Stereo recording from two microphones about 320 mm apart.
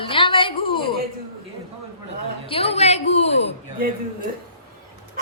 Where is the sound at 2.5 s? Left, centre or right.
Centre.